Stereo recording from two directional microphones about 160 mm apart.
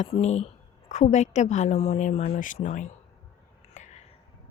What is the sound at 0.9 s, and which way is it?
A woman's voice, 45° left (ahead or behind).